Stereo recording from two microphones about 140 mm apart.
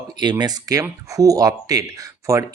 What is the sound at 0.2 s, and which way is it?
Speech, 30° right (ahead or behind).